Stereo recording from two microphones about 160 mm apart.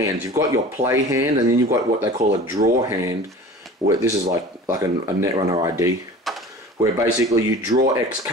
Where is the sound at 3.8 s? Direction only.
20° right (ahead or behind).